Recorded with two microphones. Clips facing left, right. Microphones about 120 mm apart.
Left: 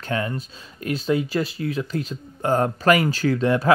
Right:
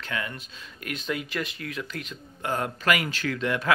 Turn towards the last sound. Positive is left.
turn(degrees=35)  # may be behind; listen again after turning